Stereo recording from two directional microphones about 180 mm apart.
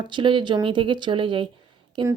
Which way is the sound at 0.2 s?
25° right (ahead or behind).